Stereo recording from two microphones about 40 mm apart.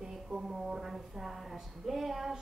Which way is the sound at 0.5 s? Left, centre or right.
Centre.